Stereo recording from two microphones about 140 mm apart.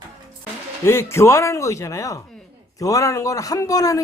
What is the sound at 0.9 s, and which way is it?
A man's voice, 20° left (ahead or behind).